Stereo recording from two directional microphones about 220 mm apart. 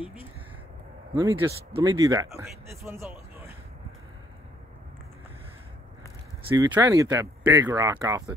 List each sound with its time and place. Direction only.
1.1 s speech: 20° right (ahead or behind)
6.5 s speech: 15° right (ahead or behind)